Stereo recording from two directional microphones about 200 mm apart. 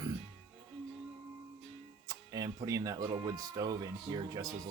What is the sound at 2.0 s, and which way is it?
A man's voice, 15° right (ahead or behind).